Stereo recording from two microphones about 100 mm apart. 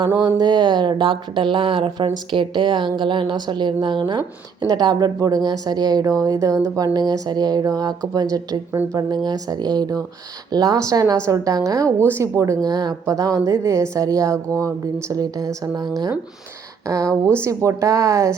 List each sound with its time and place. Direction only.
0.3 s speech: 45° right (ahead or behind)
17.1 s speech: 10° left (ahead or behind)
17.7 s speech: 30° right (ahead or behind)